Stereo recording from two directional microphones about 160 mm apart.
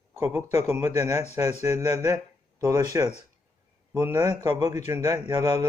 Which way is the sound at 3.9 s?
20° right (ahead or behind).